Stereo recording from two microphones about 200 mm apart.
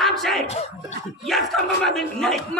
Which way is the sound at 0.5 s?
30° left (ahead or behind).